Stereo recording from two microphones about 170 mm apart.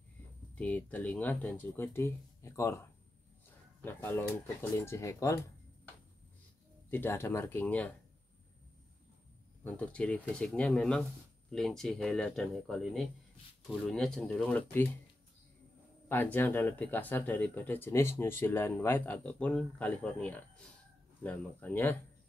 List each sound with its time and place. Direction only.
0.6 s speech: 10° left (ahead or behind)
3.8 s speech: 10° left (ahead or behind)
6.9 s speech: 15° left (ahead or behind)
9.6 s speech: 10° left (ahead or behind)
16.1 s speech: 10° left (ahead or behind)